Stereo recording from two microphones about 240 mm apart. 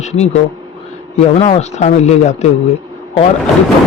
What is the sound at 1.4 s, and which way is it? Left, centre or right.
Speech, left.